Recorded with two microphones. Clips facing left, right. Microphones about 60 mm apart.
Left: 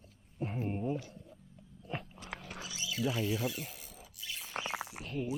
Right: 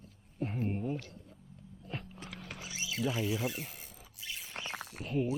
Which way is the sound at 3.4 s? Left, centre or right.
Right.